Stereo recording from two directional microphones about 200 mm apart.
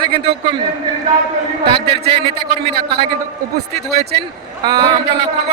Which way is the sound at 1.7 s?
30° right (ahead or behind).